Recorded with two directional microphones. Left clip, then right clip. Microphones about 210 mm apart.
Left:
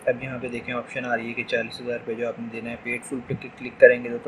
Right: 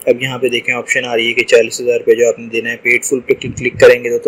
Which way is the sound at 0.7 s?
35° right (ahead or behind).